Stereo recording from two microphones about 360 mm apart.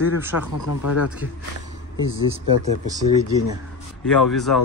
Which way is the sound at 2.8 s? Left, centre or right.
Centre.